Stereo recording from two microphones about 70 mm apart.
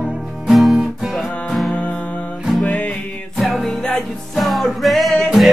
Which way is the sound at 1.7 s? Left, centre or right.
Left.